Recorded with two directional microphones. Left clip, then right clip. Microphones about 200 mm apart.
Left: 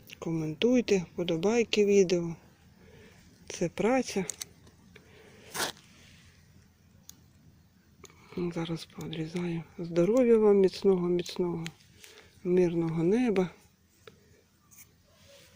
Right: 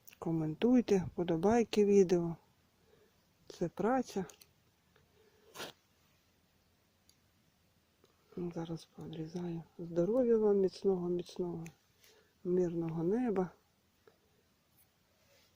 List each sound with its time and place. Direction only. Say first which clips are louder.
0.1 s speech: left 3 dB; 25° right (ahead or behind)
2.1 s speech: left 3 dB; 15° right (ahead or behind)
3.4 s speech: left 6 dB; 15° right (ahead or behind)
8.0 s a sound: left 16 dB; centre (ahead or behind)
8.5 s speech: left 7 dB; 5° right (ahead or behind)